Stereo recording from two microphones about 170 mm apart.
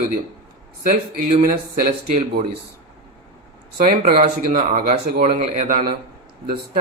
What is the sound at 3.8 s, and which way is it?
Speech, 55° right (ahead or behind).